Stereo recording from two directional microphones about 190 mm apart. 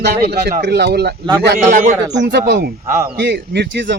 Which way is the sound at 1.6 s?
40° right (ahead or behind).